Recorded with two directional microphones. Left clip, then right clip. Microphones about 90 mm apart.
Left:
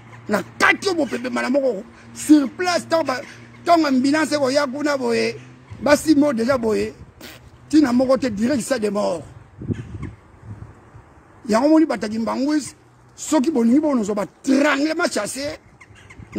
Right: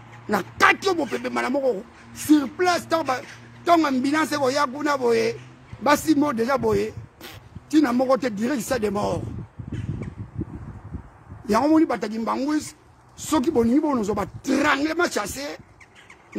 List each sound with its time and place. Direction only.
0.3 s a man's voice: 20° right (ahead or behind)
1.1 s a man's voice: 30° right (ahead or behind)
11.4 s a man's voice: 25° right (ahead or behind)